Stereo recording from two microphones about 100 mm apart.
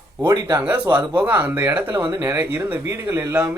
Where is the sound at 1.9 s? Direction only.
50° right (ahead or behind).